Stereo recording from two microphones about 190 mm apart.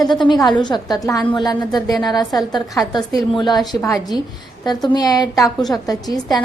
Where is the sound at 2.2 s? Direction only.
Centre (ahead or behind).